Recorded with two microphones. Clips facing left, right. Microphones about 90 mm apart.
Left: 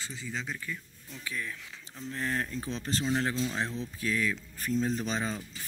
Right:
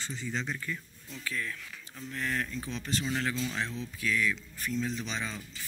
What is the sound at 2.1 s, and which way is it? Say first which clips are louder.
Speech: left 1 dB; 30° left (ahead or behind).